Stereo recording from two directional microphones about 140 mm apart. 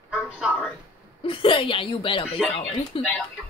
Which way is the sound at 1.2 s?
40° left (ahead or behind).